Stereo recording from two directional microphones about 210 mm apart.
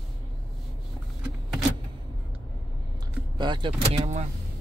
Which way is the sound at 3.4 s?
20° right (ahead or behind).